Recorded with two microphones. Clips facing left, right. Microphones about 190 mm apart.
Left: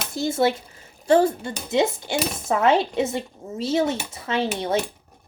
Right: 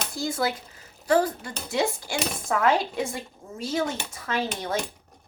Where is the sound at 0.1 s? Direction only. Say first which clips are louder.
Left 7 dB; 25° left (ahead or behind).